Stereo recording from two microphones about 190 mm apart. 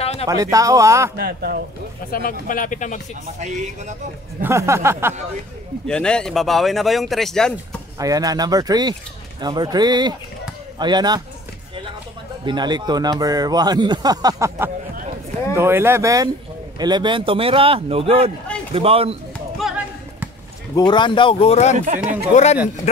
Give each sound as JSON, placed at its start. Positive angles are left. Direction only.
{"t": 0.0, "sound": "a sound", "side_deg": 30}
{"t": 0.3, "sound": "speech", "side_deg": -20}
{"t": 1.1, "sound": "speech", "side_deg": -55}
{"t": 2.0, "sound": "speech", "side_deg": 50}
{"t": 3.3, "sound": "a man's voice", "side_deg": -40}
{"t": 4.4, "sound": "speech", "side_deg": -15}
{"t": 5.9, "sound": "speech", "side_deg": 5}
{"t": 8.0, "sound": "speech", "side_deg": -20}
{"t": 12.4, "sound": "a man's voice", "side_deg": -25}
{"t": 19.3, "sound": "basketball bounce", "side_deg": -5}
{"t": 20.7, "sound": "speech", "side_deg": 25}
{"t": 21.7, "sound": "a man's voice", "side_deg": -40}
{"t": 22.3, "sound": "speech", "side_deg": 35}